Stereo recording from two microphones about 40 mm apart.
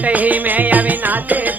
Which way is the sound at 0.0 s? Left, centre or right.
Right.